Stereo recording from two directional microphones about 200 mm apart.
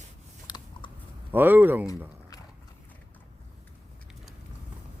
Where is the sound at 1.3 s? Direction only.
10° right (ahead or behind).